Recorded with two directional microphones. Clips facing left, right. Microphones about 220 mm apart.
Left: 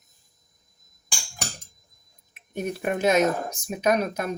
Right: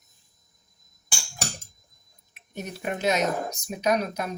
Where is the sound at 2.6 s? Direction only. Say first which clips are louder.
Left 5 dB; 50° left (ahead or behind).